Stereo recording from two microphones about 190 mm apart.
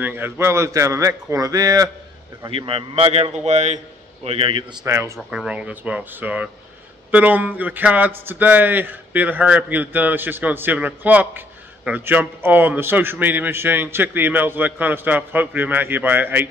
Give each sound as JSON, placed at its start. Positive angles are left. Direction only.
{"t": 0.0, "sound": "speech", "side_deg": -10}
{"t": 2.5, "sound": "a man's voice", "side_deg": -30}
{"t": 4.8, "sound": "speech", "side_deg": -15}